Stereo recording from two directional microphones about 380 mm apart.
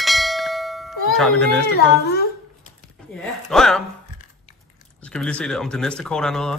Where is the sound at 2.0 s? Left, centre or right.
Left.